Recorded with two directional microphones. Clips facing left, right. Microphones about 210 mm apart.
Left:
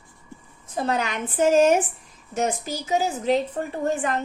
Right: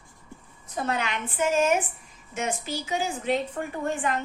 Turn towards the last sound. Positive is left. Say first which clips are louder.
# left 3 dB
turn(degrees=40)  # may be behind; listen again after turning